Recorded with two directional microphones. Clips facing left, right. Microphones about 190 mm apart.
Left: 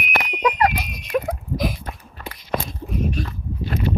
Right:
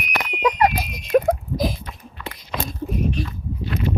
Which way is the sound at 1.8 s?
45° left (ahead or behind).